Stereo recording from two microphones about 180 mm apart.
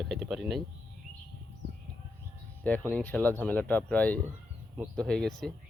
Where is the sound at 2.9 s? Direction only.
10° left (ahead or behind).